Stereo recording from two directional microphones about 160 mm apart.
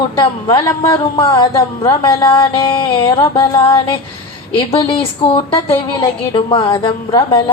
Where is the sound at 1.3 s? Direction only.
20° left (ahead or behind).